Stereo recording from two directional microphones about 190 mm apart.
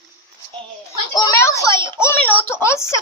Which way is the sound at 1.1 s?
15° left (ahead or behind).